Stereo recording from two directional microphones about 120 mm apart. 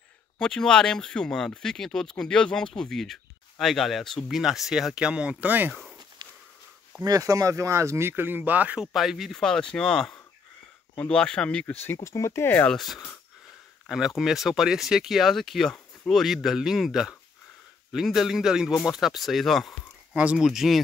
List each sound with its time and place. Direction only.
0.4 s speech: 5° left (ahead or behind); by 5.7 s 15° right (ahead or behind)
5.7 s speech: centre (ahead or behind)
6.2 s a sound: 40° right (ahead or behind)
7.0 s speech: 30° right (ahead or behind); by 8.8 s 15° right (ahead or behind)
8.8 s speech: centre (ahead or behind); by 12.7 s 15° left (ahead or behind)
12.7 s speech: centre (ahead or behind)